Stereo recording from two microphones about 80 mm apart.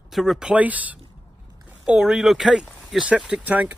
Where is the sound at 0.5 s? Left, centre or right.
Centre.